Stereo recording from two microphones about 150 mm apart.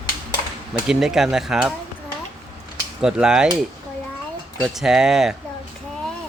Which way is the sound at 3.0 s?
5° right (ahead or behind).